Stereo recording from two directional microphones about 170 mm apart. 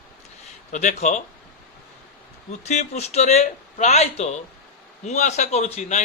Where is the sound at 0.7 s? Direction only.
45° left (ahead or behind).